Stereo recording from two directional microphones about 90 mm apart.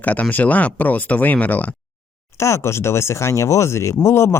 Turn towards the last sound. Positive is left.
turn(degrees=30)  # may be behind; listen again after turning